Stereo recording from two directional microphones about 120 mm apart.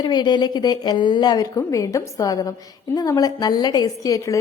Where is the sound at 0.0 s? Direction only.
35° left (ahead or behind).